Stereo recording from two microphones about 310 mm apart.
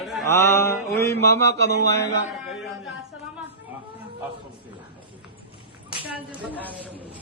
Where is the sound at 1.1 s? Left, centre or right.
Left.